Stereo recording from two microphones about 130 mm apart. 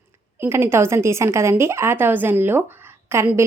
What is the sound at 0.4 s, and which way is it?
Speech, 20° right (ahead or behind).